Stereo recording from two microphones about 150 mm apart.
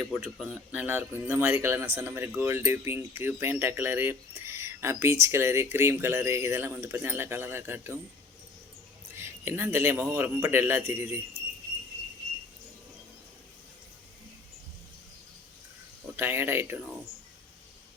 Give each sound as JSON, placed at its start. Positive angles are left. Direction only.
{"t": 0.3, "sound": "a man's voice", "side_deg": -5}
{"t": 9.1, "sound": "a man's voice", "side_deg": -15}
{"t": 16.1, "sound": "a man's voice", "side_deg": -15}